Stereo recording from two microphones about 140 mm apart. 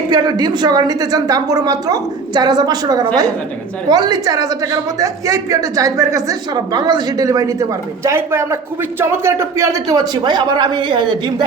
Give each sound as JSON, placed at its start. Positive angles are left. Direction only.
{"t": 0.1, "sound": "a woman's voice", "side_deg": -30}